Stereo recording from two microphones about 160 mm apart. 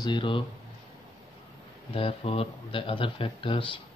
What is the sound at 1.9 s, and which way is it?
Speech, 35° left (ahead or behind).